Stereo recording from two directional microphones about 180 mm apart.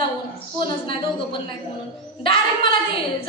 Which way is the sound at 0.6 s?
30° left (ahead or behind).